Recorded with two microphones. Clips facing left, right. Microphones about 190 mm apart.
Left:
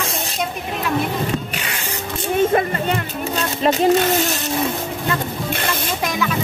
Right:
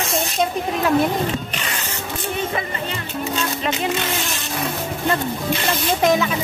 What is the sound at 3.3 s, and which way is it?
Music, 40° left (ahead or behind).